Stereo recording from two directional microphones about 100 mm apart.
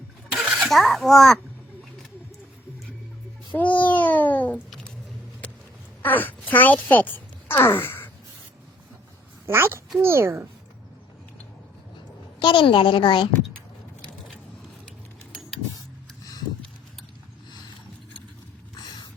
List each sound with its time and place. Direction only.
0.4 s a sound: 20° right (ahead or behind)
0.7 s a child's voice: centre (ahead or behind)
3.5 s a child's voice: 15° left (ahead or behind)
5.4 s a sound: 15° left (ahead or behind)
6.0 s speech: 20° left (ahead or behind)
9.5 s speech: 25° right (ahead or behind)
12.4 s a woman's voice: 55° left (ahead or behind)